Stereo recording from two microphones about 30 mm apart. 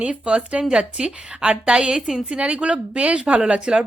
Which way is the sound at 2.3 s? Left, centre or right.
Right.